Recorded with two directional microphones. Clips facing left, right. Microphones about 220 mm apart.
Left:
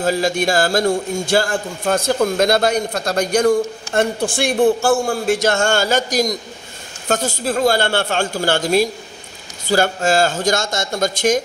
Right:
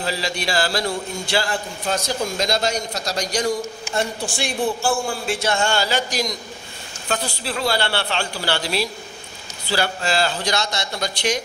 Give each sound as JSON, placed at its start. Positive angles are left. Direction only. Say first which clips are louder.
{"t": 0.0, "sound": "a man's voice", "louder": "left 8 dB", "side_deg": 50}